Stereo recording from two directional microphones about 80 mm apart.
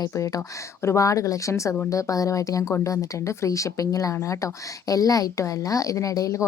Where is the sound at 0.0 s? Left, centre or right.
Left.